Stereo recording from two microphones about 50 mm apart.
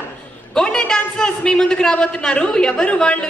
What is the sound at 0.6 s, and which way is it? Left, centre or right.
A man's voice, centre.